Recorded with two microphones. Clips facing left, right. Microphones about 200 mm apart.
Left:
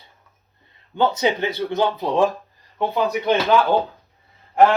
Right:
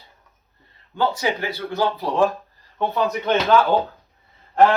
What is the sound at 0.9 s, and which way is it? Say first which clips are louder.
Speech: left 3 dB; 20° left (ahead or behind).